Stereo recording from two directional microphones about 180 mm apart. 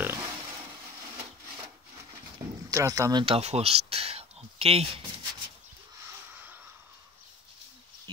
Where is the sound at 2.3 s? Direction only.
15° right (ahead or behind); by 5.0 s 30° right (ahead or behind).